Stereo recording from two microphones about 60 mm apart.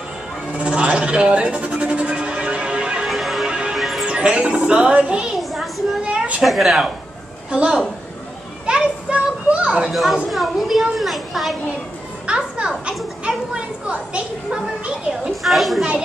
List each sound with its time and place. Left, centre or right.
0.5 s bleat: centre
3.1 s music: centre
3.4 s music: centre
3.7 s music: centre
4.0 s speech: centre
5.3 s a sound: centre
6.0 s a sound: right
6.4 s speech: centre
7.5 s a woman's voice: centre
8.6 s children playing: centre
10.3 s speech: centre
12.3 s a sound: centre
13.8 s a woman's voice: centre
15.4 s speech: centre